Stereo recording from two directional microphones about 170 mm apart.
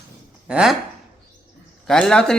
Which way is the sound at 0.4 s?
5° right (ahead or behind).